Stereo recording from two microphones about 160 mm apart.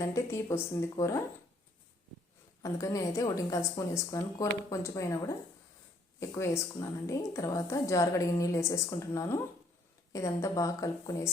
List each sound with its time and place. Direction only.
0.0 s a woman's voice: 20° left (ahead or behind)
2.6 s a woman's voice: 20° left (ahead or behind)